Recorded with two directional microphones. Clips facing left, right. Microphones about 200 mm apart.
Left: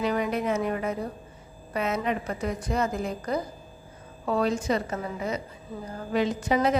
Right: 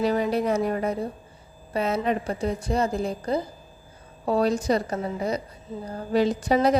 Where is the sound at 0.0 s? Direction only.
35° right (ahead or behind).